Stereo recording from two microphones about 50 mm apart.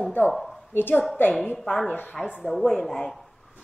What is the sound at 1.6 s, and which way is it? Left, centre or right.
Speech, centre.